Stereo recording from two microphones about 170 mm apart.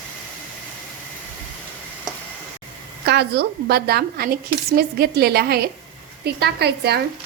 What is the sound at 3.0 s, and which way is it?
A woman's voice, 75° right (ahead or behind).